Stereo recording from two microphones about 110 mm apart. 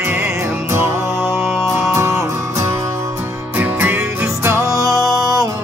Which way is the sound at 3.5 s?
15° right (ahead or behind).